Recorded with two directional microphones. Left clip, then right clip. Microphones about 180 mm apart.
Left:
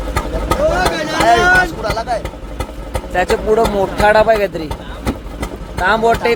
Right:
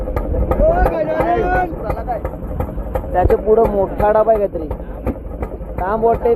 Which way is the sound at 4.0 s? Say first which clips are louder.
Left 3 dB; 40° left (ahead or behind).